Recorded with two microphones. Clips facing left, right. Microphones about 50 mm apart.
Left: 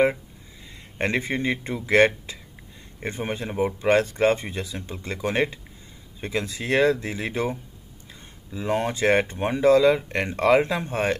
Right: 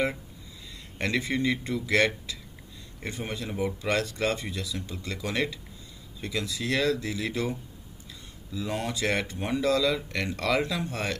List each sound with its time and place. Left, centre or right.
0.9 s speech: left
8.5 s speech: left